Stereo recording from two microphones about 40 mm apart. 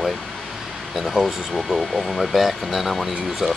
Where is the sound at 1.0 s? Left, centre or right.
Centre.